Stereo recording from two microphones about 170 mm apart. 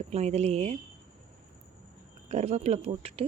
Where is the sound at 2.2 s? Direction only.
45° right (ahead or behind).